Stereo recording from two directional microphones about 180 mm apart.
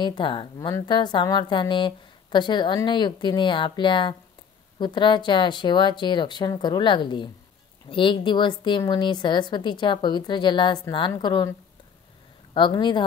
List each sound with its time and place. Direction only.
0.0 s a woman's voice: 25° left (ahead or behind)
12.5 s a woman's voice: 25° left (ahead or behind)